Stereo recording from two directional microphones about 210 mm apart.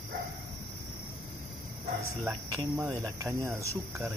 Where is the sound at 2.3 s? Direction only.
15° right (ahead or behind).